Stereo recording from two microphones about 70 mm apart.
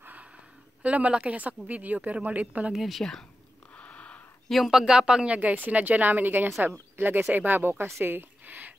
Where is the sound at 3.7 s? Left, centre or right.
Centre.